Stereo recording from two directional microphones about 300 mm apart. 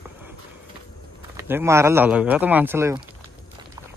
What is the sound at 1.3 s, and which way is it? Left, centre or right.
Speech, centre.